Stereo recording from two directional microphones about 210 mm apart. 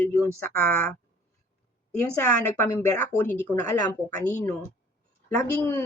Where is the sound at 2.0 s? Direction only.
10° left (ahead or behind).